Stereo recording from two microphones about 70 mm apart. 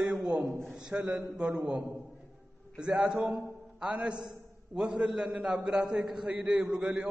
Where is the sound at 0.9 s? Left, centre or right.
Right.